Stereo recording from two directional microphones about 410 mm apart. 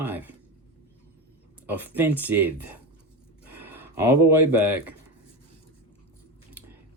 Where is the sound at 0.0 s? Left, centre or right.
Centre.